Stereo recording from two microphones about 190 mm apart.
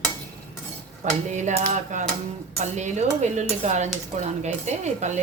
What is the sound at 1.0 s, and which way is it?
Speech, 40° right (ahead or behind).